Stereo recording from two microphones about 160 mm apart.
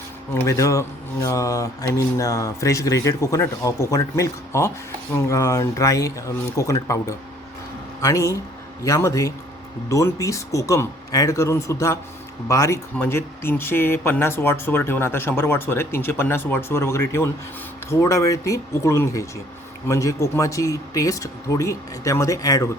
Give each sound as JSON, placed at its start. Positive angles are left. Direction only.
{"t": 0.4, "sound": "speech", "side_deg": 20}